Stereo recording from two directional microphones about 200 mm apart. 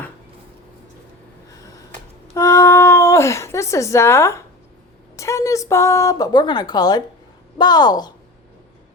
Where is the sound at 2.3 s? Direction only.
15° left (ahead or behind).